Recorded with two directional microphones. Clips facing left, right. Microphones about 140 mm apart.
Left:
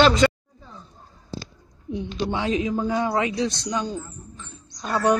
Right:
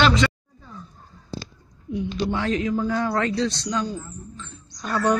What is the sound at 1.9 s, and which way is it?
A man's voice, 25° left (ahead or behind).